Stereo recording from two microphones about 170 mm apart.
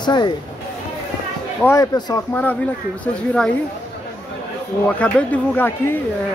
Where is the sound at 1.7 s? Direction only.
20° left (ahead or behind).